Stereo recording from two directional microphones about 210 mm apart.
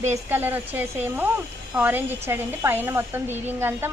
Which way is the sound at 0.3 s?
10° right (ahead or behind).